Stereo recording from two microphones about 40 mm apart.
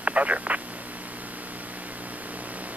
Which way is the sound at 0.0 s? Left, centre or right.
Right.